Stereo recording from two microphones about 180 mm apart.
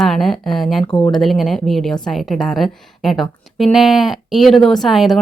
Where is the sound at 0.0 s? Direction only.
Centre (ahead or behind).